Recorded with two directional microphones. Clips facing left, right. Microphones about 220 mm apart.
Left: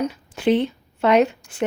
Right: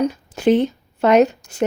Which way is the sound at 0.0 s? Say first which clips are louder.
Right 4 dB; 45° right (ahead or behind).